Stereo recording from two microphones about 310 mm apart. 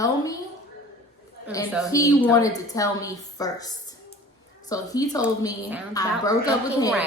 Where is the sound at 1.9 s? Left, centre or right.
Centre.